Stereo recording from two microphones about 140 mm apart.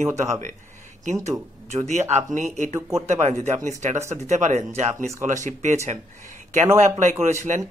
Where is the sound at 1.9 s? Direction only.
55° right (ahead or behind).